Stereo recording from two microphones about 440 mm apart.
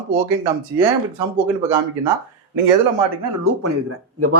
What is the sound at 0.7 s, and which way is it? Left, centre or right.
Speech, centre.